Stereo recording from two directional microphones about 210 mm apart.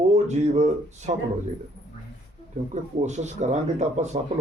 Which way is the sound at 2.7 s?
35° right (ahead or behind).